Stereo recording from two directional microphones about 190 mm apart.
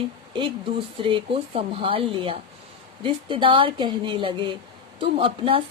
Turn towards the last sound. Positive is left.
turn(degrees=-30)  # may be behind; listen again after turning